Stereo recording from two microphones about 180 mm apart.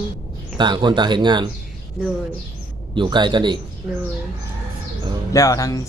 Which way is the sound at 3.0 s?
25° right (ahead or behind).